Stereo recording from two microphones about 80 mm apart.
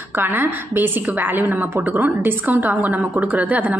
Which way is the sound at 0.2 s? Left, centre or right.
Right.